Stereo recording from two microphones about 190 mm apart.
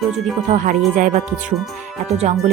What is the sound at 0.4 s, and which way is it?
Speech, 40° right (ahead or behind).